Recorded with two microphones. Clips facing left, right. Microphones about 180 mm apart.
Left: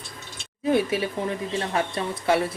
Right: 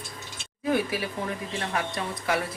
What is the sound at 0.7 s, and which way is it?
Speech, 25° left (ahead or behind).